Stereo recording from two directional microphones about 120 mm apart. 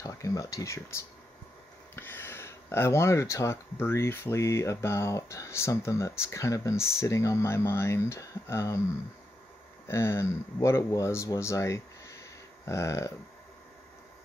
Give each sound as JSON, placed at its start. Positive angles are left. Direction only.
{"t": 0.0, "sound": "speech", "side_deg": 25}
{"t": 9.8, "sound": "speech", "side_deg": 25}